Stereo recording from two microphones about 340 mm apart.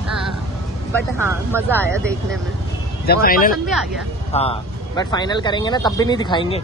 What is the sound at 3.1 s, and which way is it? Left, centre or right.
Speech, left.